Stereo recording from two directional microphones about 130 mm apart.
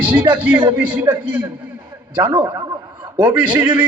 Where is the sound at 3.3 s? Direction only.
35° right (ahead or behind).